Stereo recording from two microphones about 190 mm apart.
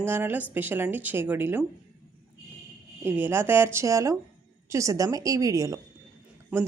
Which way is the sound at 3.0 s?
10° right (ahead or behind).